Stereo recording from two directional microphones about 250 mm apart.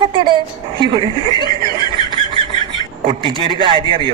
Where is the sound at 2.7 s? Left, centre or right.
Centre.